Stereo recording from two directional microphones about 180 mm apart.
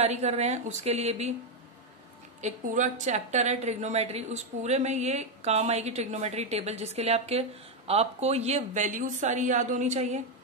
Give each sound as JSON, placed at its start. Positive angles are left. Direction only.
{"t": 0.0, "sound": "a woman's voice", "side_deg": -40}
{"t": 2.4, "sound": "a woman's voice", "side_deg": -40}